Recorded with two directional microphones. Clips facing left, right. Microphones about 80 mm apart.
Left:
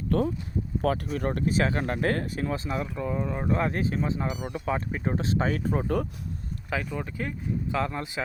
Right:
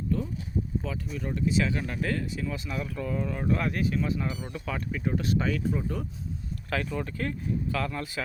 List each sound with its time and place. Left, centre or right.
0.1 s speech: left
0.8 s speech: left
6.7 s speech: centre